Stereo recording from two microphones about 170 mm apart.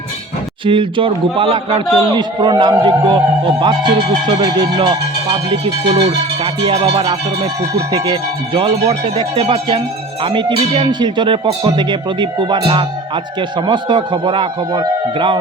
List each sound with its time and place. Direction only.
0.6 s a man's voice: 30° right (ahead or behind)
7.9 s a man's voice: 30° right (ahead or behind)